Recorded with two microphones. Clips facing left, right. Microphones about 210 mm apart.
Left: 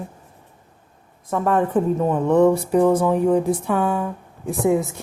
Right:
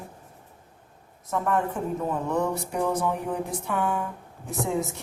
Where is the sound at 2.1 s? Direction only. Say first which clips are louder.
Left 12 dB; 90° left.